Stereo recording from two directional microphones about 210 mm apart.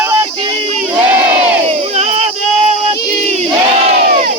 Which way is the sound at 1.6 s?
30° right (ahead or behind).